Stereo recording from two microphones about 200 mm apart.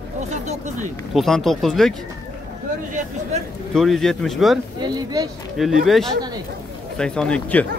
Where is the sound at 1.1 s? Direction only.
Centre (ahead or behind).